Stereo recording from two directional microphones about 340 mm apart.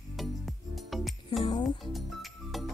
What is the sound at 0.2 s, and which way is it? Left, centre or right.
Music, centre.